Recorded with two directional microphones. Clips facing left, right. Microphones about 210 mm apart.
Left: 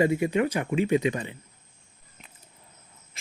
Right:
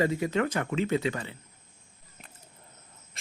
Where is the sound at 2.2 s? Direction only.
5° right (ahead or behind).